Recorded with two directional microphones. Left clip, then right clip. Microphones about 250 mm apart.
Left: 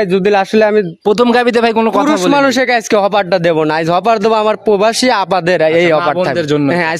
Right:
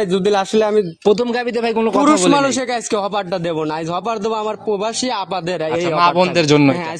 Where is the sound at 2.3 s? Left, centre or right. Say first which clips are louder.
Left 6 dB; left.